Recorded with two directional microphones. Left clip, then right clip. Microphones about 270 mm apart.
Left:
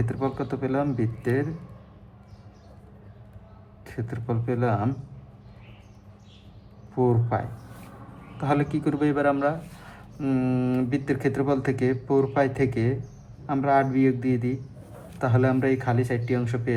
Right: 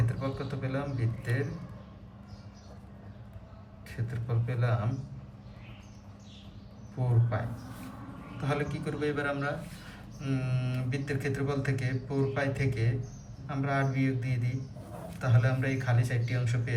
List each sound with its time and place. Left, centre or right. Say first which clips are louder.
0.2 s speech: left 8 dB; centre
3.8 s speech: left 9 dB; centre
7.0 s speech: left 11 dB; centre
8.4 s speech: left 9 dB; left